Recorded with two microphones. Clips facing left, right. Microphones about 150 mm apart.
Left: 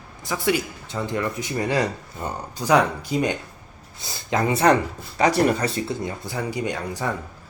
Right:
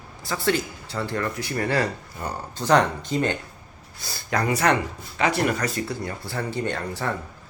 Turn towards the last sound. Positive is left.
turn(degrees=15)  # may be behind; listen again after turning